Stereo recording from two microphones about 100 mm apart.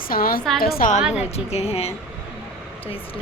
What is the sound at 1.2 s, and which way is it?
Speech, 90° left.